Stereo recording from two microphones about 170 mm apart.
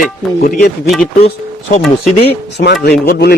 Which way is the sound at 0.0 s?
60° left (ahead or behind).